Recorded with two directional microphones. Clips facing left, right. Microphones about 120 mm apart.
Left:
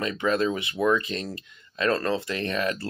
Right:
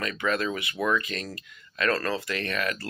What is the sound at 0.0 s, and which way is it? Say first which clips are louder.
Speech: left 3 dB; 25° left (ahead or behind).